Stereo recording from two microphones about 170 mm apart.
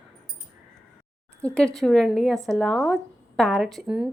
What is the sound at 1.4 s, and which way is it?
A woman's voice, 5° left (ahead or behind).